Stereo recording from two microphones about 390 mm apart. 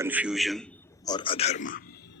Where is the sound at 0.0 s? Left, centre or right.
Centre; by 2.0 s left.